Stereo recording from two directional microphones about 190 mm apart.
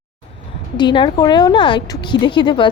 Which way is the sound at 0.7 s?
25° left (ahead or behind).